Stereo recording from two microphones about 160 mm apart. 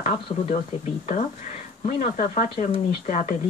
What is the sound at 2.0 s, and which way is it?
Speech, 55° left (ahead or behind).